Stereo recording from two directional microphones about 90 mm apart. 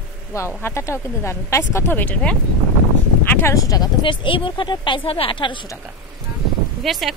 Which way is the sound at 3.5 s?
40° left (ahead or behind).